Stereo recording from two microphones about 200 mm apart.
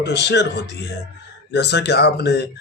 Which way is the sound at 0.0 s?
55° left (ahead or behind).